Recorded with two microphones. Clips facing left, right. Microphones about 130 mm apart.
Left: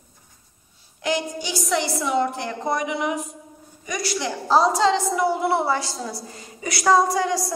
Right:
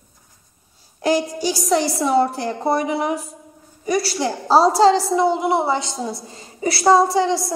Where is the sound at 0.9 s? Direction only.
35° right (ahead or behind).